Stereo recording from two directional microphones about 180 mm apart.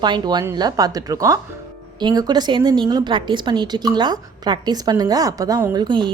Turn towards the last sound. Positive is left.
turn(degrees=-25)  # may be behind; listen again after turning